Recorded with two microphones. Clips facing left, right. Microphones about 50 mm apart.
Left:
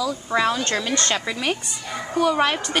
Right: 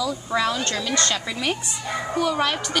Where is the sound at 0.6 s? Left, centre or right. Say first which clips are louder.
Left 1 dB; left.